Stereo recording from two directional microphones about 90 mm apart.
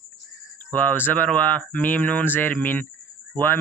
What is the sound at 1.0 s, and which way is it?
Speech, 20° left (ahead or behind).